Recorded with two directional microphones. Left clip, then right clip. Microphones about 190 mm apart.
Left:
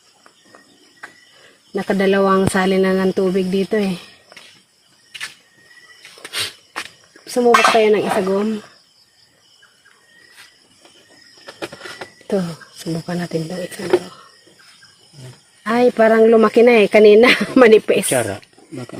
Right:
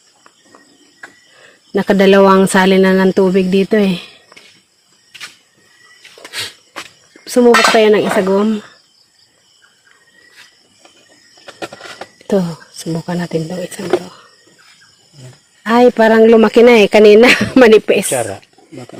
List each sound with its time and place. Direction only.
1.7 s speech: 40° right (ahead or behind)
6.3 s a sound: 10° right (ahead or behind)
7.3 s speech: 40° right (ahead or behind)
12.3 s speech: 30° right (ahead or behind)
12.9 s speech: 20° right (ahead or behind)
15.6 s speech: 25° right (ahead or behind)
18.1 s speech: 40° left (ahead or behind)